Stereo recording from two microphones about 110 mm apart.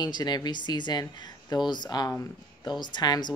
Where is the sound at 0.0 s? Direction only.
40° left (ahead or behind).